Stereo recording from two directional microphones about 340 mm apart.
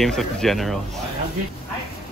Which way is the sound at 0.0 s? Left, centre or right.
Centre.